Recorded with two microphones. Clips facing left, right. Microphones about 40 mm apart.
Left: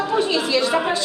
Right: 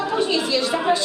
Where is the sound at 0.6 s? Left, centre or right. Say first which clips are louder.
Left 2 dB; centre.